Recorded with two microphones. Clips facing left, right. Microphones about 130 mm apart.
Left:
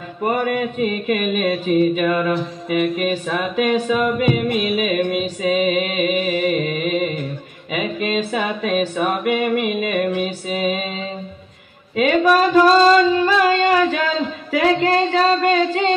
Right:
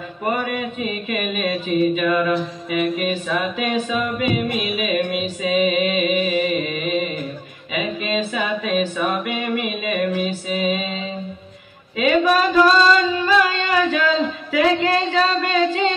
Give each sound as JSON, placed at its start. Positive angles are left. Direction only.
{"t": 0.4, "sound": "mantra", "side_deg": 45}
{"t": 12.0, "sound": "singing", "side_deg": 45}